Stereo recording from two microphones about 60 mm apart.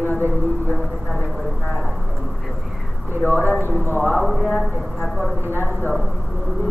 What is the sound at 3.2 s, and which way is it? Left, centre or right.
Speech, left.